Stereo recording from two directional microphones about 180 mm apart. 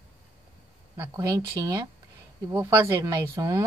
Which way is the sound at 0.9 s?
15° right (ahead or behind).